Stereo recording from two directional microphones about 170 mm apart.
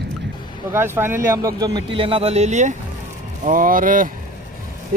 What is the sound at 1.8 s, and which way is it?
Speech, 30° right (ahead or behind).